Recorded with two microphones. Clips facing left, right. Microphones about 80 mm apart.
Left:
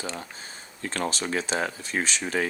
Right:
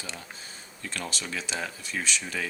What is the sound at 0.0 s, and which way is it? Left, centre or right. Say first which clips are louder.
Speech: left 6 dB; left.